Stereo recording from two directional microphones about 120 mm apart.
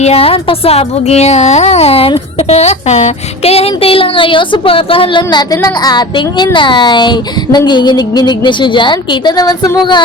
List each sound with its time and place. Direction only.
0.0 s speech: 55° left (ahead or behind); by 10.0 s 35° left (ahead or behind)